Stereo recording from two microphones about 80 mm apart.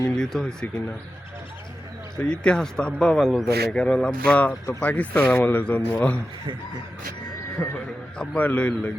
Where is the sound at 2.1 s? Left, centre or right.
Centre.